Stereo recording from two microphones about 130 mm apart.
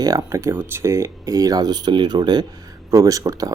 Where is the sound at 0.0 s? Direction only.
25° right (ahead or behind).